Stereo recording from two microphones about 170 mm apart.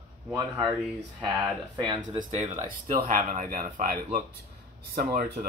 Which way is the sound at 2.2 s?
45° right (ahead or behind).